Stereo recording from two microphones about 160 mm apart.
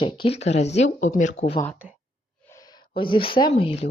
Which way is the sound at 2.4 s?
20° left (ahead or behind).